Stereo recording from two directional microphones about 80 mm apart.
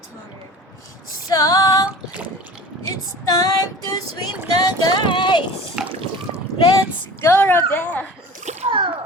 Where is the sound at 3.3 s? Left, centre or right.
Left.